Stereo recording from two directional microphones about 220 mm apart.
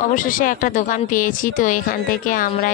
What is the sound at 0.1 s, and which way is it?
Speech, 35° left (ahead or behind).